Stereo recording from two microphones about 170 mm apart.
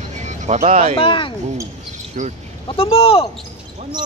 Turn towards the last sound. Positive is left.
turn(degrees=35)  # may be behind; listen again after turning